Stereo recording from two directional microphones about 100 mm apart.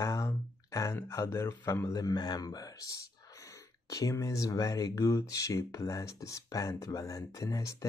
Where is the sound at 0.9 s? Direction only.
25° left (ahead or behind).